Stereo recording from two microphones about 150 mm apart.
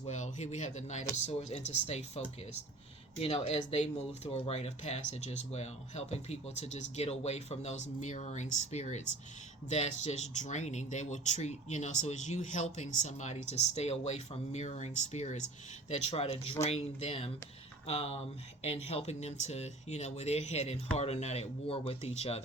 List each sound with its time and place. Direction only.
0.0 s speech: 50° left (ahead or behind)